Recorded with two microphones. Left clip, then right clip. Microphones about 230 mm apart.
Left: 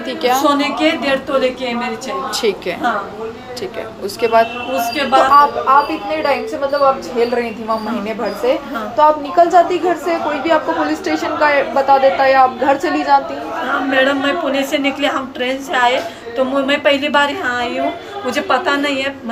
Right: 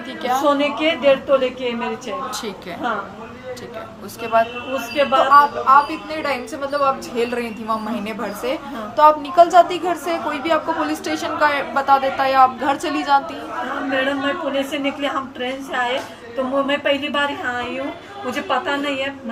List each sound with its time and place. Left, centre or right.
0.2 s a woman's voice: right
0.6 s a woman's voice: centre
2.3 s a woman's voice: right
4.2 s a woman's voice: right
13.9 s a woman's voice: centre